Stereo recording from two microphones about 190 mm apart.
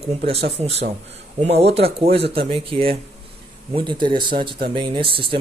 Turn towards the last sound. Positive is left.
turn(degrees=-25)  # may be behind; listen again after turning